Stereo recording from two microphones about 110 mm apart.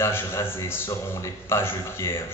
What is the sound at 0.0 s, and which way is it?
A man's voice, 25° left (ahead or behind).